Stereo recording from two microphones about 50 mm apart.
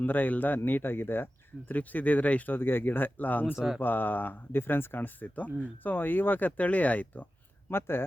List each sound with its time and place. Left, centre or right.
0.0 s speech: left
2.6 s speech: left
7.7 s speech: left